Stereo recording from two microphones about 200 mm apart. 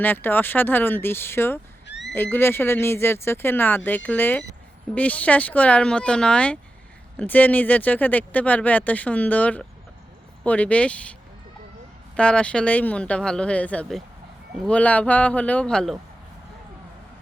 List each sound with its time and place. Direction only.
0.0 s speech: 10° left (ahead or behind)
1.9 s owl: 60° left (ahead or behind)
2.1 s speech: 10° left (ahead or behind)
12.1 s speech: 5° left (ahead or behind)